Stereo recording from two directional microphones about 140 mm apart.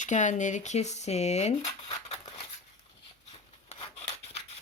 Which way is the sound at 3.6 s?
45° left (ahead or behind).